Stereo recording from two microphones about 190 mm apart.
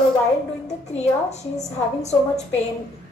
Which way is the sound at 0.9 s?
35° left (ahead or behind).